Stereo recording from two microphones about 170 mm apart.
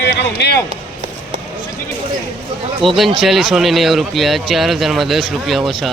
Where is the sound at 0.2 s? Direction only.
75° left (ahead or behind).